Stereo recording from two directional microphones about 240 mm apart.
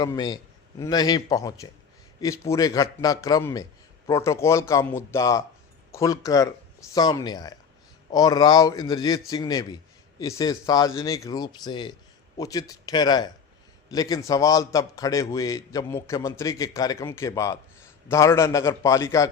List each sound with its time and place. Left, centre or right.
0.0 s a man's voice: centre